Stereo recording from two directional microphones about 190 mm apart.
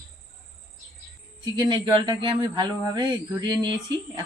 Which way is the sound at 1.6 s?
25° right (ahead or behind).